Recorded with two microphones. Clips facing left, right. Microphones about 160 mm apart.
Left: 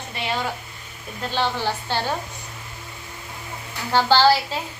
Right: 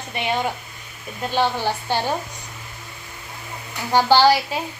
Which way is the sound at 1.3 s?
15° right (ahead or behind).